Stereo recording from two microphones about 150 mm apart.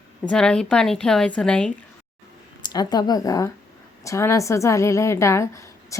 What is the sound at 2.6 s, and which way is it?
A woman's voice, 30° left (ahead or behind).